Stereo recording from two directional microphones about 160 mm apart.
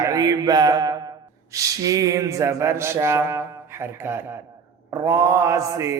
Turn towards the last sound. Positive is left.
turn(degrees=-20)  # may be behind; listen again after turning